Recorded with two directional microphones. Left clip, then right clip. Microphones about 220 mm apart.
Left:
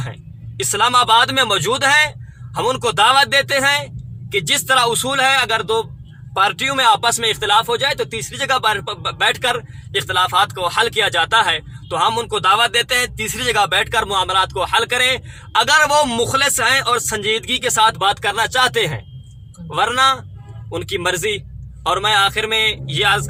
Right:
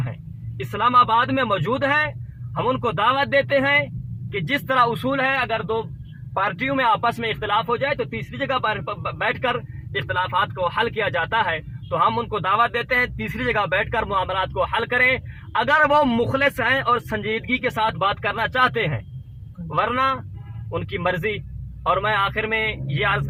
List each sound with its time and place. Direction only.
0.7 s speech: 30° left (ahead or behind)
18.0 s speech: 25° left (ahead or behind)
20.7 s speech: 40° left (ahead or behind)